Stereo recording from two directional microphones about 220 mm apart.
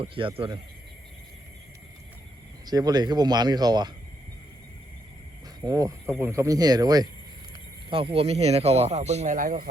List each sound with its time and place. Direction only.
0.0 s speech: 25° right (ahead or behind)
2.6 s speech: 20° right (ahead or behind)
5.6 s speech: 15° right (ahead or behind); by 9.6 s 40° right (ahead or behind)